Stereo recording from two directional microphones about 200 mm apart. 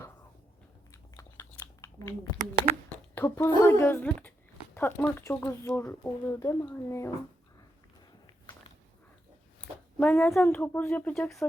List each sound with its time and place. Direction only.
0.9 s chewing: 15° left (ahead or behind)
3.2 s speech: 10° left (ahead or behind)
9.6 s speech: 10° left (ahead or behind)